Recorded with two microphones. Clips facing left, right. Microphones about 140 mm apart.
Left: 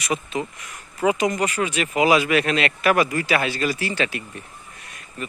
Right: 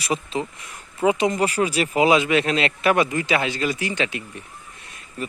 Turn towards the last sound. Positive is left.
turn(degrees=-30)  # may be behind; listen again after turning